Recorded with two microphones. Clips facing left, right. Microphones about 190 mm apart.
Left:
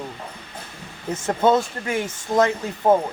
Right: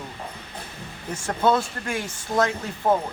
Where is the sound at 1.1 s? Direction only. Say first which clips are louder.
Left 3 dB; 20° left (ahead or behind).